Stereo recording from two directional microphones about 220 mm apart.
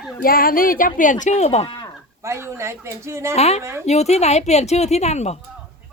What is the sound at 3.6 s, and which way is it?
Speech, 10° right (ahead or behind).